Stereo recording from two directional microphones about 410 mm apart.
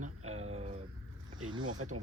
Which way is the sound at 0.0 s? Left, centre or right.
Centre.